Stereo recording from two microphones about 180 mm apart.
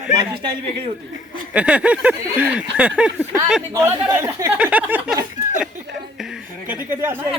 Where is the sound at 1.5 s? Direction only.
5° right (ahead or behind).